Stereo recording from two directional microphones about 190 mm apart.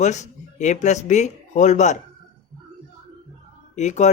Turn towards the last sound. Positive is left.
turn(degrees=40)  # may be behind; listen again after turning